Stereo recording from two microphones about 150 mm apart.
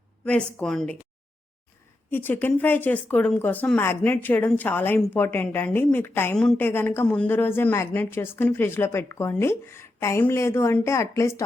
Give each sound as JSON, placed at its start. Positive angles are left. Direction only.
{"t": 0.3, "sound": "a woman's voice", "side_deg": 5}
{"t": 2.0, "sound": "a woman's voice", "side_deg": 15}
{"t": 6.3, "sound": "a woman's voice", "side_deg": 5}